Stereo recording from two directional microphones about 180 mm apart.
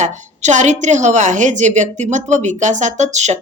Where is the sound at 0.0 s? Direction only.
40° right (ahead or behind).